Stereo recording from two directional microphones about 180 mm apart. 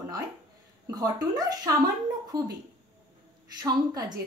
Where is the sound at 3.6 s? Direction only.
20° right (ahead or behind).